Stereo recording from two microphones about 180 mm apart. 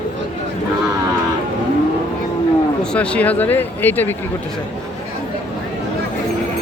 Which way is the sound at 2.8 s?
5° left (ahead or behind).